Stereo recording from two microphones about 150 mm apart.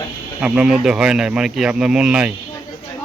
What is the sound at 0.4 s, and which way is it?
Speech, 5° right (ahead or behind).